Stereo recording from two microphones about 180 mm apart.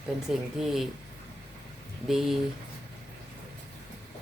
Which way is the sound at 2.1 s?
Centre (ahead or behind).